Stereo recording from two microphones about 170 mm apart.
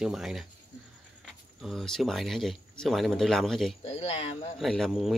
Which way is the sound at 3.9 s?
35° left (ahead or behind).